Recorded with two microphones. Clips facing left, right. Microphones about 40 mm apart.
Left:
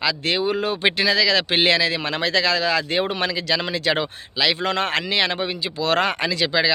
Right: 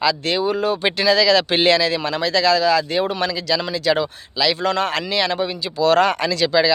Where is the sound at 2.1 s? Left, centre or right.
Left.